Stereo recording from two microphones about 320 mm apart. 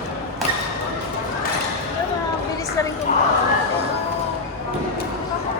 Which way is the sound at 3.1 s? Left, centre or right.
Left.